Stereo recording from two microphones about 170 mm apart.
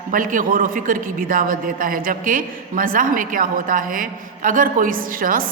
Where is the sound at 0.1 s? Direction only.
50° right (ahead or behind).